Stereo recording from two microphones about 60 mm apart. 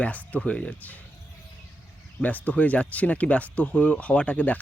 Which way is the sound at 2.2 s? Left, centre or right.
Left.